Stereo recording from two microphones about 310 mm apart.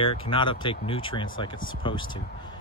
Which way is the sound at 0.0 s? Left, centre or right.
Centre.